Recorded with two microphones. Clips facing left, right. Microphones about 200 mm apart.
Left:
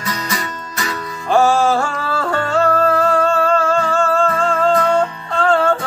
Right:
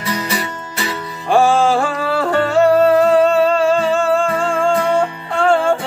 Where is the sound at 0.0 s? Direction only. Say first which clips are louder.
Right 3 dB; 30° right (ahead or behind).